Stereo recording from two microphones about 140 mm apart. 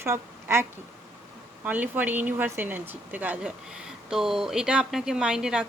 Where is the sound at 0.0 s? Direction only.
15° right (ahead or behind).